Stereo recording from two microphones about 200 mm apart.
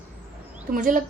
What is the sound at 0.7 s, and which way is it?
Speech, 40° right (ahead or behind).